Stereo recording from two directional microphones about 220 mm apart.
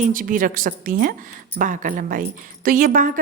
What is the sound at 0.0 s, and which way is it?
A woman's voice, 40° right (ahead or behind).